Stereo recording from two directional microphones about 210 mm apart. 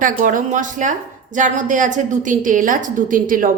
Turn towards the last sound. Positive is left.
turn(degrees=-40)  # may be behind; listen again after turning